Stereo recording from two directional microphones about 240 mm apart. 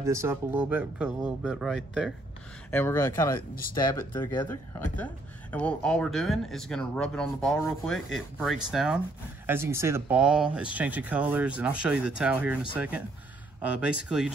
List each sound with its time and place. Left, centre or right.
0.0 s speech: centre
4.5 s speech: centre